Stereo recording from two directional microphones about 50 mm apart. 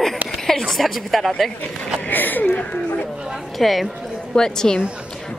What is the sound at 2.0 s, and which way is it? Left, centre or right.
Speech, left.